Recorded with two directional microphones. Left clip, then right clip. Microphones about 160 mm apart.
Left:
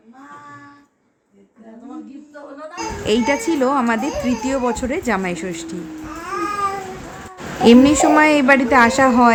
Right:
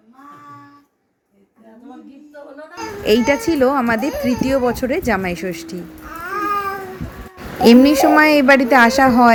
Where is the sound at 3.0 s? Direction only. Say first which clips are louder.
Right 3 dB; 15° right (ahead or behind).